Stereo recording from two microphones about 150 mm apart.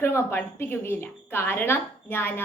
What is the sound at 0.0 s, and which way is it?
A woman's voice, 15° left (ahead or behind).